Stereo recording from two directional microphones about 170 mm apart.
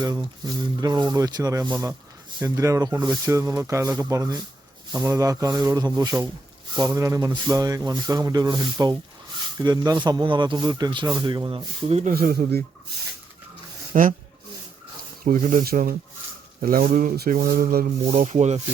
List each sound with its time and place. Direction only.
0.0 s speech: 25° right (ahead or behind)
12.1 s speech: 65° right (ahead or behind)
13.9 s speech: 50° right (ahead or behind)
15.2 s speech: 55° right (ahead or behind)